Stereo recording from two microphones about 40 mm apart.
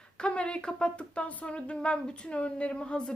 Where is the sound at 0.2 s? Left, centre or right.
Left.